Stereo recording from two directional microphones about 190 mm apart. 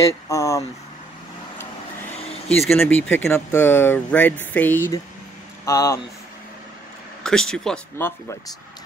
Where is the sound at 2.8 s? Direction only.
10° left (ahead or behind).